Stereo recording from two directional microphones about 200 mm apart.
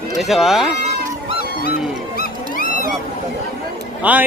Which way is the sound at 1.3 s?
50° left (ahead or behind).